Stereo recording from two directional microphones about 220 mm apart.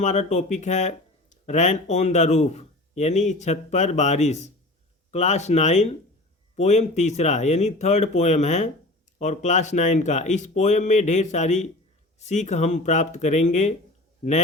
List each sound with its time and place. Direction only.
0.0 s speech: 30° left (ahead or behind)